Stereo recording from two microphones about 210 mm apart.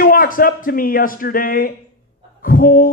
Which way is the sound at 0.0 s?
40° left (ahead or behind).